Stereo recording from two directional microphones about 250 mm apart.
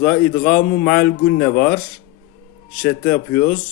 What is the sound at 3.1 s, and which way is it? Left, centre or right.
Speech, left.